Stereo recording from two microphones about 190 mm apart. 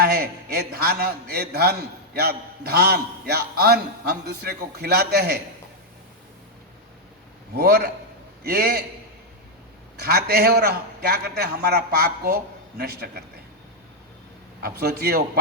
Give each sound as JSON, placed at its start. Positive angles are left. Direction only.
{"t": 0.0, "sound": "a man's voice", "side_deg": -55}
{"t": 7.6, "sound": "a man's voice", "side_deg": -55}
{"t": 10.0, "sound": "a man's voice", "side_deg": -55}
{"t": 14.6, "sound": "a man's voice", "side_deg": -55}